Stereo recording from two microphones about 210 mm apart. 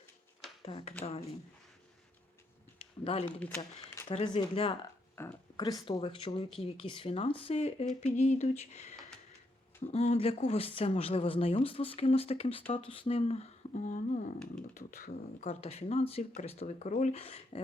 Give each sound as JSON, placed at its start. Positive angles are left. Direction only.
{"t": 0.6, "sound": "speech", "side_deg": 25}
{"t": 2.7, "sound": "speech", "side_deg": 25}
{"t": 5.1, "sound": "speech", "side_deg": 10}
{"t": 5.8, "sound": "speech", "side_deg": 25}